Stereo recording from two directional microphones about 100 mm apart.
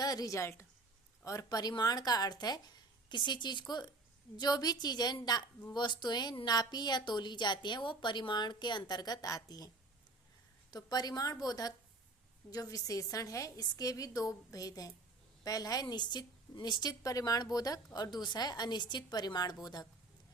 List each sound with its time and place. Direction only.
0.0 s a woman's voice: 40° left (ahead or behind)